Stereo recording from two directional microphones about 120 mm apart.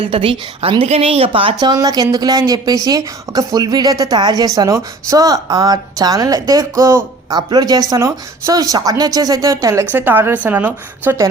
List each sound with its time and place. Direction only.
0.0 s a woman's voice: 50° right (ahead or behind)
1.6 s a woman's voice: 30° right (ahead or behind)
9.9 s a woman's voice: 15° right (ahead or behind)